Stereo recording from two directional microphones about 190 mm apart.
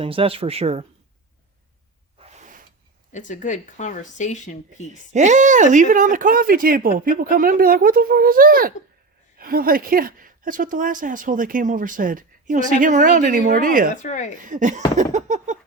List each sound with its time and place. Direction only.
0.0 s speech: 30° right (ahead or behind)
3.1 s speech: 40° left (ahead or behind)
5.1 s speech: 40° right (ahead or behind)
13.9 s speech: 40° left (ahead or behind)
14.4 s speech: 40° right (ahead or behind)
14.9 s a sound: 40° right (ahead or behind)